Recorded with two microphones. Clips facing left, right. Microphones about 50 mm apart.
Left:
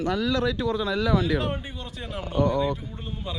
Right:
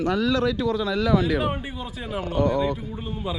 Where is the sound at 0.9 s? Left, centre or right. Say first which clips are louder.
Right 3 dB; right.